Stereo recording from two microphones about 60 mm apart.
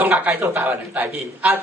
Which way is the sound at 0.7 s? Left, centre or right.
Right.